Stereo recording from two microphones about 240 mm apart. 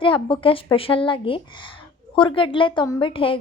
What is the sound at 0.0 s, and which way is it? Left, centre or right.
A woman's voice, left.